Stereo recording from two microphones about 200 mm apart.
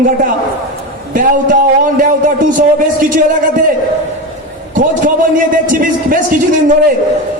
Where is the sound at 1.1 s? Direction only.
40° right (ahead or behind).